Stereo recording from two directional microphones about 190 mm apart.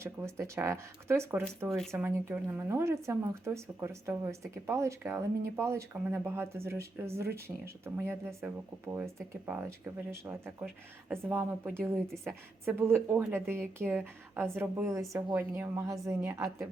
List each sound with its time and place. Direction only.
0.0 s speech: 15° right (ahead or behind)
9.5 s speech: 15° right (ahead or behind)